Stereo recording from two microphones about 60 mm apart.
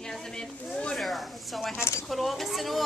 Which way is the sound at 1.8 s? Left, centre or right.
Left.